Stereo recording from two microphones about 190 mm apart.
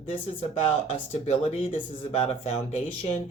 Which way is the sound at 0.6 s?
35° left (ahead or behind).